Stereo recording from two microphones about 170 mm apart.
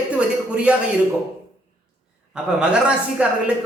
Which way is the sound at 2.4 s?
5° right (ahead or behind).